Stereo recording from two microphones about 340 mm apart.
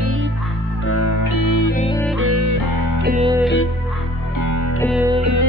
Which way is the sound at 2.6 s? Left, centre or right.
Right.